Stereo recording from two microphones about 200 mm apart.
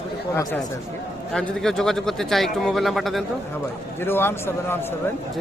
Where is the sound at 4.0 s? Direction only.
10° left (ahead or behind).